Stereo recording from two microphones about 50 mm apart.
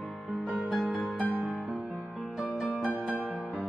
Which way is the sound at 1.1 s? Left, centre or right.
Left.